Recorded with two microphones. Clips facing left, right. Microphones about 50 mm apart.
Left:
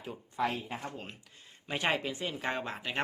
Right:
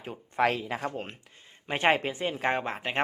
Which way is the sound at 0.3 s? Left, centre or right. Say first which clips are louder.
Right 7 dB; right.